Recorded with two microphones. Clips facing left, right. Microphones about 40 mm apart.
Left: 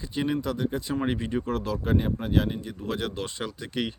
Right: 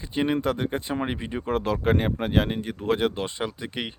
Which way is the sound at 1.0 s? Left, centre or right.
Centre.